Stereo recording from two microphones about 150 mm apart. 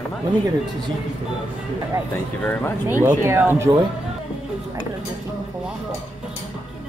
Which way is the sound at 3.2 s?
15° right (ahead or behind).